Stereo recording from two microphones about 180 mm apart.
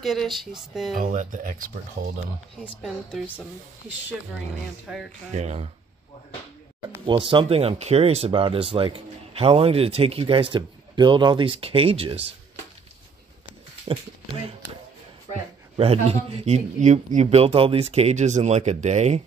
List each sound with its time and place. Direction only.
0.0 s speech: centre (ahead or behind)
0.9 s speech: 45° right (ahead or behind)
2.6 s speech: centre (ahead or behind)
4.8 s speech: 5° right (ahead or behind)
5.3 s speech: 40° right (ahead or behind)
6.9 s speech: 25° right (ahead or behind)
13.9 s speech: 30° right (ahead or behind)
15.7 s speech: 35° right (ahead or behind)